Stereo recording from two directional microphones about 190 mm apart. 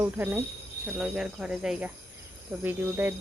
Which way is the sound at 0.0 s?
10° right (ahead or behind).